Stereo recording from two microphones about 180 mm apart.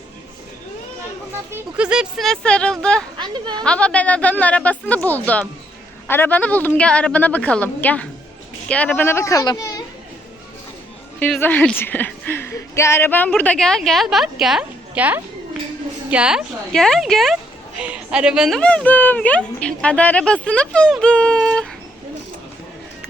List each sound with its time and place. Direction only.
1.5 s speech: 5° right (ahead or behind)
3.2 s speech: 25° right (ahead or behind)
3.6 s speech: 5° left (ahead or behind)
11.2 s speech: 10° left (ahead or behind)